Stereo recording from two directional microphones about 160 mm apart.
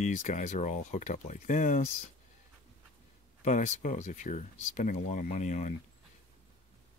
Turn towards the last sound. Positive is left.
turn(degrees=50)  # may be behind; listen again after turning